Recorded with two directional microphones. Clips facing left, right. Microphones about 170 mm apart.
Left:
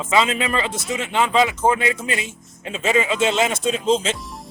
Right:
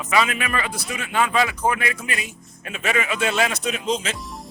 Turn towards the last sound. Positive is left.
turn(degrees=25)  # may be behind; listen again after turning